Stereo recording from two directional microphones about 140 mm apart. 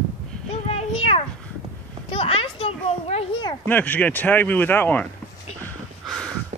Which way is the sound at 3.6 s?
10° left (ahead or behind).